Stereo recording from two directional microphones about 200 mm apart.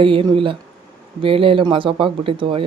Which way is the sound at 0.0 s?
25° right (ahead or behind).